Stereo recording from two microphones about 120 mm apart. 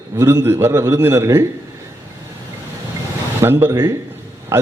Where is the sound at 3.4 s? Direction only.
20° right (ahead or behind).